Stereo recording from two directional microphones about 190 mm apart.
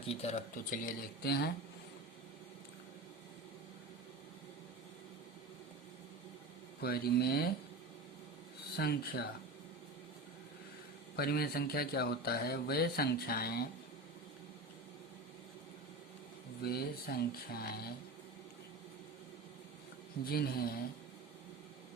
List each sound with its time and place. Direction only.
0.1 s speech: 35° left (ahead or behind)
0.5 s speech: 45° left (ahead or behind)
6.8 s speech: 55° left (ahead or behind)
8.7 s speech: 55° left (ahead or behind)
11.2 s speech: 55° left (ahead or behind)
16.6 s speech: 55° left (ahead or behind)
20.2 s speech: 55° left (ahead or behind)